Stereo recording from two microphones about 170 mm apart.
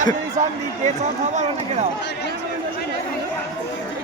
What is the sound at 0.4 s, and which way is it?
Speech, 50° right (ahead or behind).